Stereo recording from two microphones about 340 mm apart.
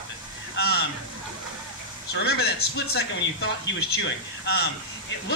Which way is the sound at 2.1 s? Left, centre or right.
Left.